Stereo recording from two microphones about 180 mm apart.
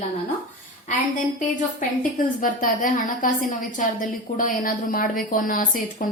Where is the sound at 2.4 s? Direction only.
50° left (ahead or behind).